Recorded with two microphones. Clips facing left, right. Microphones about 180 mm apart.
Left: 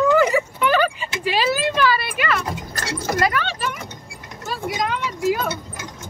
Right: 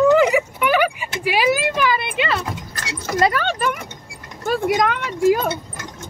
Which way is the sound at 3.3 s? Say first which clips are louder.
Right 3 dB; 45° right (ahead or behind).